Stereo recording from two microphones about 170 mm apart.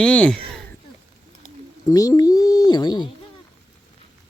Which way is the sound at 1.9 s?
20° left (ahead or behind).